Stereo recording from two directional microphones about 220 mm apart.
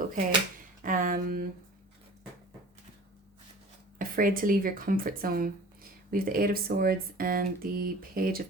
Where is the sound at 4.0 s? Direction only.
40° right (ahead or behind).